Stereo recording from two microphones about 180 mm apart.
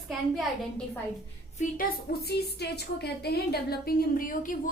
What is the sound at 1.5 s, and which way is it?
A woman's voice, 55° left (ahead or behind).